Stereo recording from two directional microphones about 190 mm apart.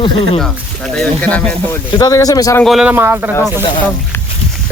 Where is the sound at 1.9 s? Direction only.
20° left (ahead or behind).